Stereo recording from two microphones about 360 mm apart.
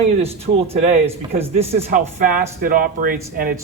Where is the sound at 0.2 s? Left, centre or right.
Centre.